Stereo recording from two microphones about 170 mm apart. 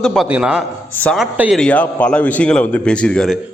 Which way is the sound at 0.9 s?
10° left (ahead or behind).